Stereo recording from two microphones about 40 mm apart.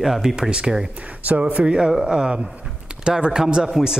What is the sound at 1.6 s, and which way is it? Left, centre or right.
Speech, right.